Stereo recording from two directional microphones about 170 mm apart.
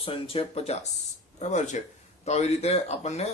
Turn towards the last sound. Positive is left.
turn(degrees=40)  # may be behind; listen again after turning